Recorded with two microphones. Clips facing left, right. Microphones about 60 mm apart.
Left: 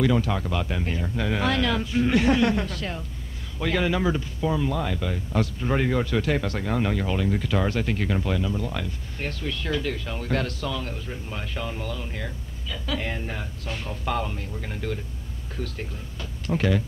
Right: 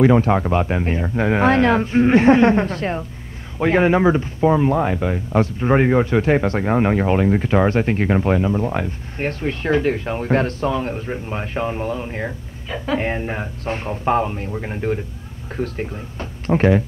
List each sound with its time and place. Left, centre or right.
0.0 s speech: right